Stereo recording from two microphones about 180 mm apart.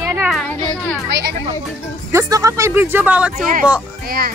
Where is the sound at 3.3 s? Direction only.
45° right (ahead or behind).